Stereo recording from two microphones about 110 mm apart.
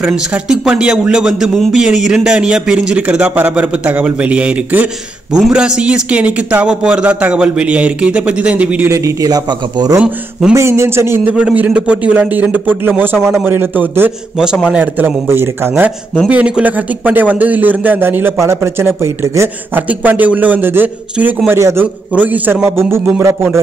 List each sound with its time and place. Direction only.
0.0 s speech: 10° right (ahead or behind)
8.9 s speech: 30° right (ahead or behind)
9.9 s speech: 10° right (ahead or behind)
10.5 s a man's voice: 25° right (ahead or behind)
13.2 s a man's voice: 5° right (ahead or behind)
13.5 s a man's voice: 20° right (ahead or behind)
14.4 s speech: 5° right (ahead or behind)
16.3 s speech: 10° right (ahead or behind)
19.9 s a man's voice: 15° right (ahead or behind)